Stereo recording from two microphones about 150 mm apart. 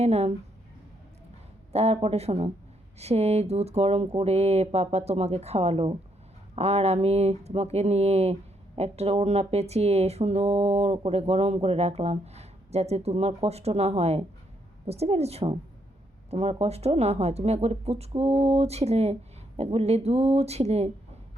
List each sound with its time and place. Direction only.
0.0 s speech: 45° right (ahead or behind)
1.7 s speech: 45° right (ahead or behind)